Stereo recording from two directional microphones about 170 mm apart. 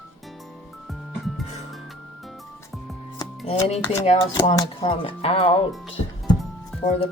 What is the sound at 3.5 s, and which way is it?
Speech, 40° left (ahead or behind).